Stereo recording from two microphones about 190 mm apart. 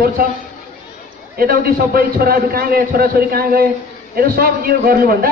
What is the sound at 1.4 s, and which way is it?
A man's voice, 50° right (ahead or behind).